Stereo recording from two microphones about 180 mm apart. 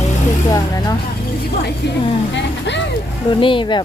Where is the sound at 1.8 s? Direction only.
70° left (ahead or behind).